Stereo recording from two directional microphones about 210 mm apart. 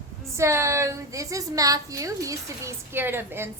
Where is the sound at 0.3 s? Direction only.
15° right (ahead or behind).